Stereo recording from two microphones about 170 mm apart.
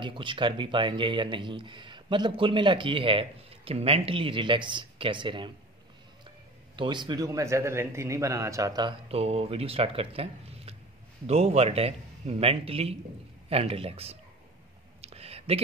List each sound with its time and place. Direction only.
0.0 s speech: 30° right (ahead or behind)
6.8 s speech: 25° right (ahead or behind)
9.1 s speech: 35° right (ahead or behind)
15.0 s a sound: 35° right (ahead or behind)